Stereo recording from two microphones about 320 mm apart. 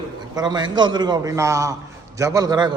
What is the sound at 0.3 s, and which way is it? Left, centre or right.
A man's voice, centre.